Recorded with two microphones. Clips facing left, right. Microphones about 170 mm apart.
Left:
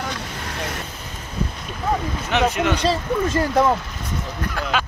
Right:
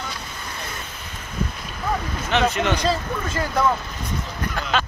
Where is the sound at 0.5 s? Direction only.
80° left.